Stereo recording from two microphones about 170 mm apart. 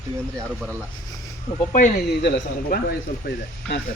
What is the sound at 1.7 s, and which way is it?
Speech, 50° left (ahead or behind).